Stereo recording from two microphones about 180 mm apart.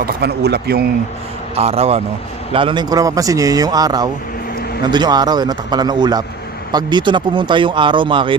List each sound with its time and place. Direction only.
0.0 s a man's voice: 65° right (ahead or behind)
1.5 s a man's voice: 35° right (ahead or behind)